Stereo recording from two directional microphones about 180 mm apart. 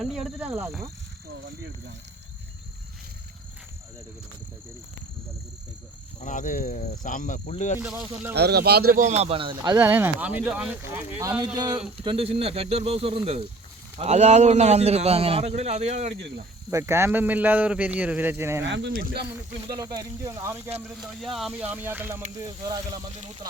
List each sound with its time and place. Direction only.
0.0 s speech: centre (ahead or behind)
1.3 s speech: 90° right
6.1 s speech: 45° left (ahead or behind)
7.8 s speech: 10° right (ahead or behind)
8.3 s speech: 65° right (ahead or behind); by 9.7 s 25° right (ahead or behind)
9.7 s speech: 10° right (ahead or behind)
12.0 s a man's voice: 30° right (ahead or behind)
16.6 s speech: 15° right (ahead or behind)
18.6 s speech: 80° right
18.9 s speech: 50° right (ahead or behind)
19.8 s speech: 20° right (ahead or behind)
20.8 s speech: centre (ahead or behind); by 22.8 s 20° right (ahead or behind)